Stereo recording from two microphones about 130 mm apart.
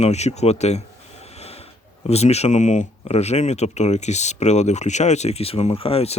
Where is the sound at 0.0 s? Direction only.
60° left (ahead or behind).